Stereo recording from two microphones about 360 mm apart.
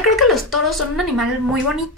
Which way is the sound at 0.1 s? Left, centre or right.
Centre.